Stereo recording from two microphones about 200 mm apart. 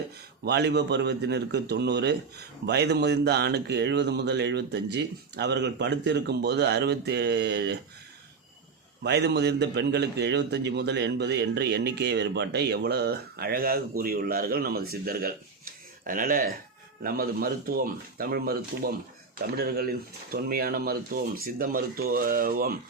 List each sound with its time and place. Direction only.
0.4 s a man's voice: 55° right (ahead or behind)
9.0 s a man's voice: 55° right (ahead or behind)